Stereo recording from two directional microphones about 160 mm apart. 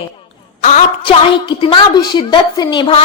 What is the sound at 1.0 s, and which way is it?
A woman's voice, 30° left (ahead or behind).